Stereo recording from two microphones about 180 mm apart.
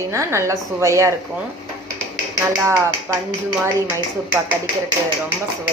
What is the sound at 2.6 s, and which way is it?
Speech, 15° right (ahead or behind).